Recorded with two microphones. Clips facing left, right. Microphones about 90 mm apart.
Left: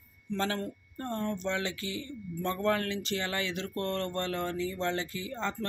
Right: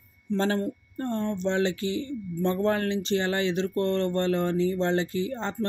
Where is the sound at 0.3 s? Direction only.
15° right (ahead or behind).